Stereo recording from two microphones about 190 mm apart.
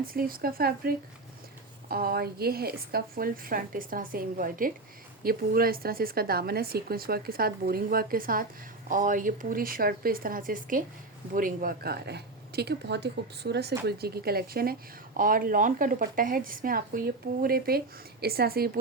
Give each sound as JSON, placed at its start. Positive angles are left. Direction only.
{"t": 0.1, "sound": "speech", "side_deg": -50}